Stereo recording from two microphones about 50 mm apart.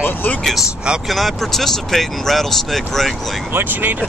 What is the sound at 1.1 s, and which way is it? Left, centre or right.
Speech, centre.